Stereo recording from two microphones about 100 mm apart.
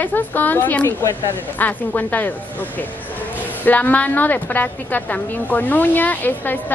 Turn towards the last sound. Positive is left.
turn(degrees=20)  # may be behind; listen again after turning